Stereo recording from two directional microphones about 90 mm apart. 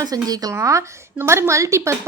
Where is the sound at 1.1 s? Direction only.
30° right (ahead or behind).